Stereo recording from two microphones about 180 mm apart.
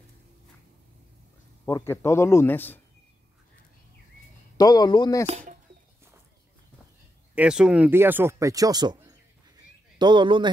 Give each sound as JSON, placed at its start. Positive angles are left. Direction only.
{"t": 1.7, "sound": "speech", "side_deg": 15}
{"t": 4.6, "sound": "a man's voice", "side_deg": 20}
{"t": 5.2, "sound": "speech", "side_deg": -40}
{"t": 7.3, "sound": "speech", "side_deg": -5}